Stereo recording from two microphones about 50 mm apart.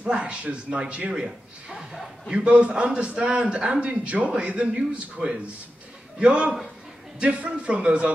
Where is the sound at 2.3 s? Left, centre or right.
Right.